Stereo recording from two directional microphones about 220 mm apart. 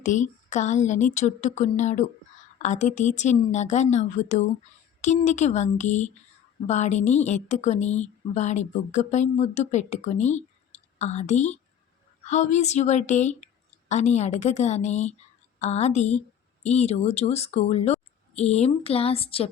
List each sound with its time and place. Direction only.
0.0 s a woman's voice: 35° left (ahead or behind)